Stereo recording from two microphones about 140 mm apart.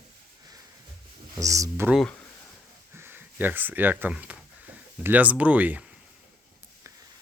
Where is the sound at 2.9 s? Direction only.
15° right (ahead or behind).